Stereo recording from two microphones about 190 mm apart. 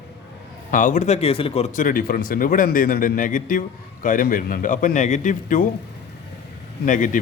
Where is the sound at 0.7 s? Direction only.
40° left (ahead or behind).